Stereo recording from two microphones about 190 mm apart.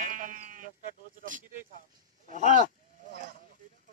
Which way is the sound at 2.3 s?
40° left (ahead or behind).